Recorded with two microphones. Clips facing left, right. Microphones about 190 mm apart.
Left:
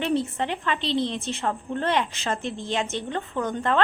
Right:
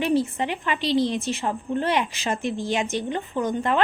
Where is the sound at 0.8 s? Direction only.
25° left (ahead or behind).